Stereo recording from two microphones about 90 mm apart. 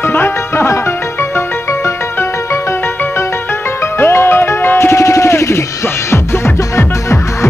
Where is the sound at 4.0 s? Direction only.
25° left (ahead or behind).